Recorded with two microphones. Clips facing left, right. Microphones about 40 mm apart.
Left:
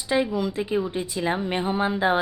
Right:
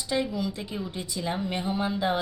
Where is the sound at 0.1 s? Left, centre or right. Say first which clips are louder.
Left 5 dB; left.